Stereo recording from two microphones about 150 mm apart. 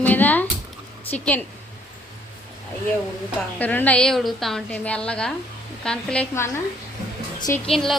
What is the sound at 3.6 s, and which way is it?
A woman's voice, 10° left (ahead or behind).